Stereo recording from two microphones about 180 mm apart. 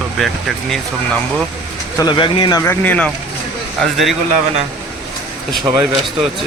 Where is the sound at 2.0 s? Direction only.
25° left (ahead or behind); by 4.1 s centre (ahead or behind).